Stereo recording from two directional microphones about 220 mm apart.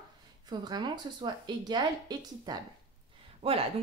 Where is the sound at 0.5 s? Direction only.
20° right (ahead or behind).